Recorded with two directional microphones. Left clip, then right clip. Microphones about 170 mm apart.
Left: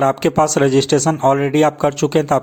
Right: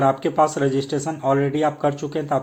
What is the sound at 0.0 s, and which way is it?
Speech, 45° left (ahead or behind).